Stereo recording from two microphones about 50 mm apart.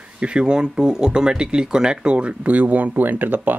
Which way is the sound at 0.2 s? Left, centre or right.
Centre.